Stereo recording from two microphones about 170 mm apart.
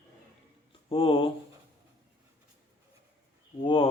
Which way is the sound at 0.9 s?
30° left (ahead or behind).